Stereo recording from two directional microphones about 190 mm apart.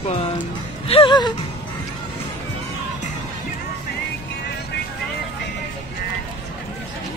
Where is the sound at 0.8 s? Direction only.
30° left (ahead or behind).